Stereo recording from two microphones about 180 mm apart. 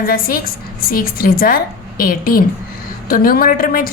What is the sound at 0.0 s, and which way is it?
A woman's voice, 55° left (ahead or behind).